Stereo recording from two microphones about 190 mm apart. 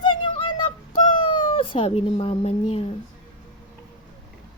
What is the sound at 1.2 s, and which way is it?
Speech, 25° left (ahead or behind).